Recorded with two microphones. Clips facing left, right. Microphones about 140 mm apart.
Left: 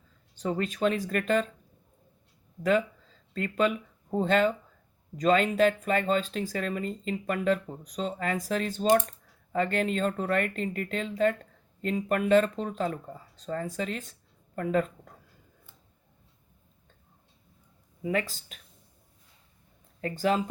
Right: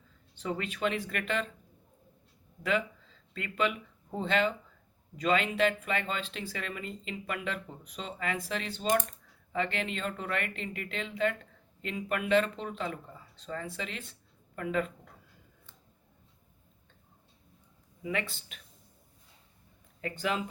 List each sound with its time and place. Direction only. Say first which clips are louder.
0.3 s speech: left 5 dB; 40° left (ahead or behind)
2.6 s speech: left 6 dB; 40° left (ahead or behind)
18.0 s speech: left 5 dB; 40° left (ahead or behind)
20.0 s speech: left 6 dB; 35° left (ahead or behind)